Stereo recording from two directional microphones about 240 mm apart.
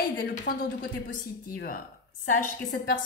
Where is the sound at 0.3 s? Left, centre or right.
Left.